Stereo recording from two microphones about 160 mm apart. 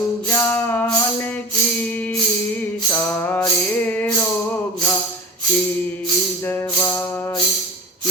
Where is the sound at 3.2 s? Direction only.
10° left (ahead or behind).